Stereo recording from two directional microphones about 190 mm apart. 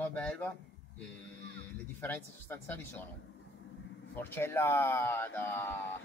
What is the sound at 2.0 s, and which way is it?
Speech, 10° left (ahead or behind).